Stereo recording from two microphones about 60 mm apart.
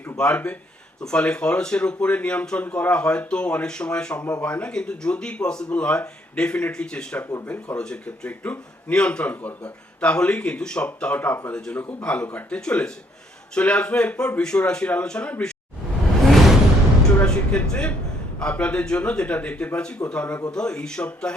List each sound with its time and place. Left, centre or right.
0.2 s speech: centre
16.2 s music: centre
17.2 s speech: centre